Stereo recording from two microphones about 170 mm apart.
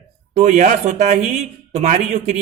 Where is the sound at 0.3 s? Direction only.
45° right (ahead or behind).